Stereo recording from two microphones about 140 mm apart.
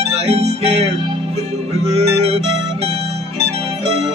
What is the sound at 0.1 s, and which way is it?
Music, 50° right (ahead or behind).